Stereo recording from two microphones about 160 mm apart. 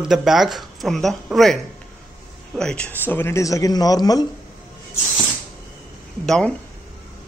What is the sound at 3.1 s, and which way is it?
Speech, 15° left (ahead or behind).